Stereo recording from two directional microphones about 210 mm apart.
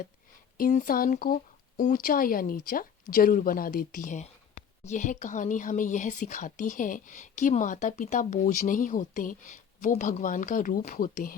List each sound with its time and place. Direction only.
0.5 s a woman's voice: 40° left (ahead or behind)